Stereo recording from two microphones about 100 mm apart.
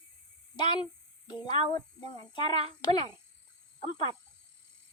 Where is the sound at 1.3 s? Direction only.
50° left (ahead or behind).